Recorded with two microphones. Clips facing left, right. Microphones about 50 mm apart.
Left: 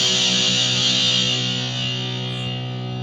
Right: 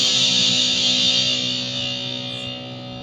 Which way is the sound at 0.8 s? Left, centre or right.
Centre.